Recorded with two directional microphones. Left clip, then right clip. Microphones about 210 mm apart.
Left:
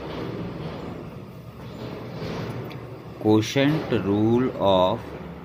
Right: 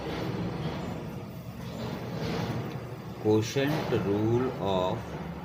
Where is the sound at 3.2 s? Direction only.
40° left (ahead or behind).